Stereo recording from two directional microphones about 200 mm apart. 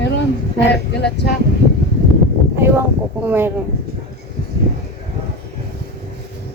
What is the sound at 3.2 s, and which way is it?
Speech, 10° right (ahead or behind).